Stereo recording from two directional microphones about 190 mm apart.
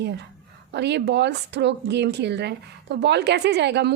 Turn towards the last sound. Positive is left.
turn(degrees=-60)  # may be behind; listen again after turning